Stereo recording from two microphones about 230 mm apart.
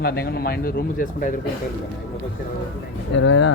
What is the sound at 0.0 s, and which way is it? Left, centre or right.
Speech, left.